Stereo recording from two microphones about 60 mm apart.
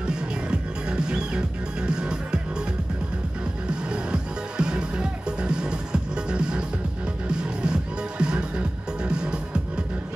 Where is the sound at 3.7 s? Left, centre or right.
Centre.